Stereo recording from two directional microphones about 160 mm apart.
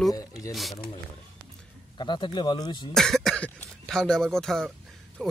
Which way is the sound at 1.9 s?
30° left (ahead or behind).